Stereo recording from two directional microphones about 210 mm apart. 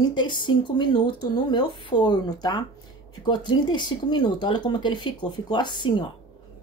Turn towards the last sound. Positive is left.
turn(degrees=20)  # may be behind; listen again after turning